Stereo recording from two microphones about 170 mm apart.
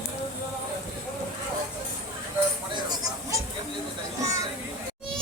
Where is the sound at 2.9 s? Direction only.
20° right (ahead or behind).